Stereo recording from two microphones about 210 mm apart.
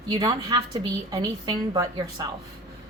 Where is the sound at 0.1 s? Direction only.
20° right (ahead or behind).